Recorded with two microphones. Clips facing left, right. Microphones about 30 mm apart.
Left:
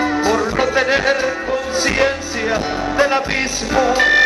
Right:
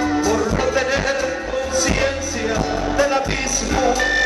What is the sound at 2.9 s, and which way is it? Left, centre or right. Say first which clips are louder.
Music: left 3 dB; left.